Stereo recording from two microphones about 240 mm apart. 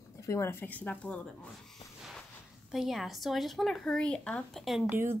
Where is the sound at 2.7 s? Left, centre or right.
Centre.